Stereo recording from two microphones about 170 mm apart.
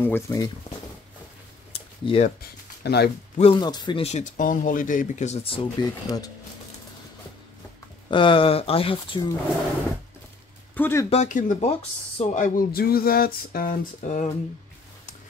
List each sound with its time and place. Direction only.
0.0 s speech: 15° left (ahead or behind)
1.7 s a sound: 35° left (ahead or behind)
2.8 s speech: 70° left (ahead or behind)
3.3 s speech: 30° left (ahead or behind)
8.1 s speech: 30° left (ahead or behind)
10.8 s speech: 15° left (ahead or behind)
11.1 s speech: 45° left (ahead or behind)